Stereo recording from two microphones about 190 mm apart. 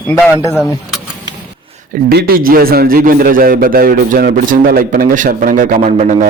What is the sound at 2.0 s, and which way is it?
A man's voice, 55° right (ahead or behind).